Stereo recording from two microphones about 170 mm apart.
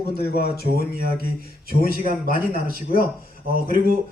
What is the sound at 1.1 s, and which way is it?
Speech, 65° left (ahead or behind).